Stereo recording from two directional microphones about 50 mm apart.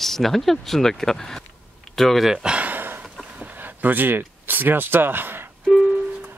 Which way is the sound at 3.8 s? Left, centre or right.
Right.